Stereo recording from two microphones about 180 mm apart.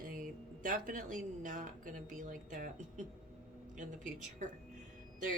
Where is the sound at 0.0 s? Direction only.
50° right (ahead or behind).